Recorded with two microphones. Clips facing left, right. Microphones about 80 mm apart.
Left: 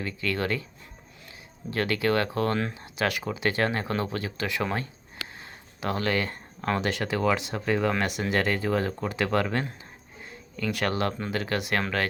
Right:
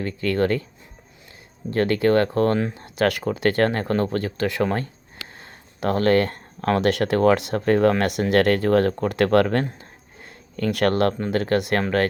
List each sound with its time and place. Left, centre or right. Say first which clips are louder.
0.0 s speech: right 7 dB; right
1.7 s speech: right 7 dB; right
10.2 s a sound: right 6 dB; right
11.2 s speech: right 8 dB; right